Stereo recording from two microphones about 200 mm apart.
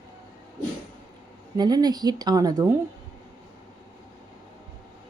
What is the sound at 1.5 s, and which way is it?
A woman's voice, 20° right (ahead or behind).